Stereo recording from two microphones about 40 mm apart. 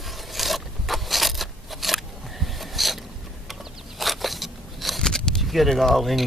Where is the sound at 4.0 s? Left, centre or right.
Centre.